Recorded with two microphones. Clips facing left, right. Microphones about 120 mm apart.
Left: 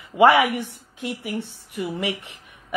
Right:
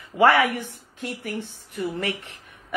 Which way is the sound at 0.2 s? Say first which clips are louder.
Left 2 dB; 15° left (ahead or behind).